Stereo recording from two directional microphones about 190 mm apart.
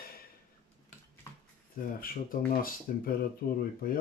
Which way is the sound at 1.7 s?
50° left (ahead or behind).